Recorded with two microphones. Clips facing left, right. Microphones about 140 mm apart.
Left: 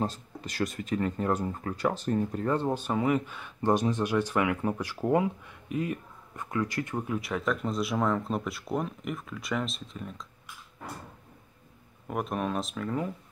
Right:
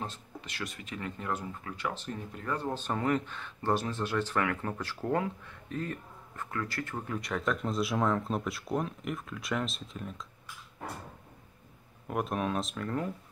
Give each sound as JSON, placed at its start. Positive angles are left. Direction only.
{"t": 0.0, "sound": "speech", "side_deg": 40}
{"t": 2.7, "sound": "speech", "side_deg": 10}
{"t": 12.1, "sound": "speech", "side_deg": 0}